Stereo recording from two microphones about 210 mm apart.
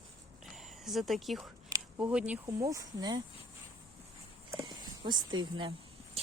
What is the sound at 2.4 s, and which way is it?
Speech, 15° right (ahead or behind).